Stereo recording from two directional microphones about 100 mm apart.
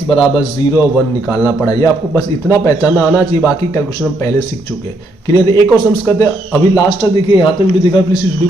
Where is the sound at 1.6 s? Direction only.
30° left (ahead or behind).